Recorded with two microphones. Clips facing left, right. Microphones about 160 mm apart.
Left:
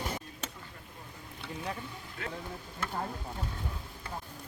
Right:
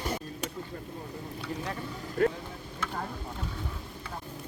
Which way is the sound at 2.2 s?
45° right (ahead or behind).